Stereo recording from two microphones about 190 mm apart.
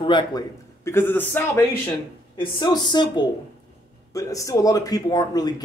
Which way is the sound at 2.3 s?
25° left (ahead or behind).